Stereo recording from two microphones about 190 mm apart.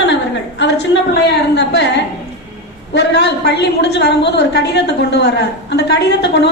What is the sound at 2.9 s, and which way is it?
A woman's voice, 60° left (ahead or behind).